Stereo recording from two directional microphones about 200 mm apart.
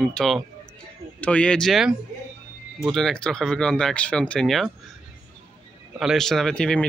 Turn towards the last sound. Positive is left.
turn(degrees=5)  # may be behind; listen again after turning